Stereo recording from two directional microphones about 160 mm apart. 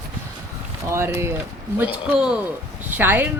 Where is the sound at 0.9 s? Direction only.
15° right (ahead or behind).